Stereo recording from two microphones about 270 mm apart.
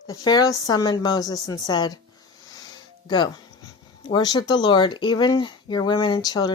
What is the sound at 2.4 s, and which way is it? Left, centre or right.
Music, centre.